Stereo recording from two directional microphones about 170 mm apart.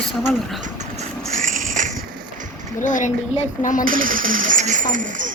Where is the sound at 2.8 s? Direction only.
50° left (ahead or behind).